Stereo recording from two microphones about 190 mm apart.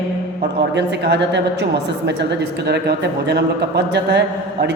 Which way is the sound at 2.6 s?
60° right (ahead or behind).